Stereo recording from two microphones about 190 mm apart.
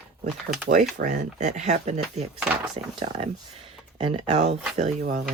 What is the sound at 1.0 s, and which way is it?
Speech, 40° right (ahead or behind).